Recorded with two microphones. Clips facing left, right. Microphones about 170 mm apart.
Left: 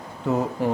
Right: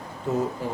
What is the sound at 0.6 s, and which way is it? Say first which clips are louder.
Speech: left 7 dB; 65° left (ahead or behind).